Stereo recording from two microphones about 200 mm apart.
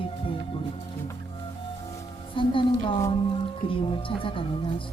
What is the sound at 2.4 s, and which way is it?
Speech, 25° left (ahead or behind).